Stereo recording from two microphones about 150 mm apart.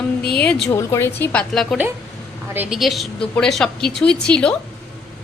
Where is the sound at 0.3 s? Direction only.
5° left (ahead or behind).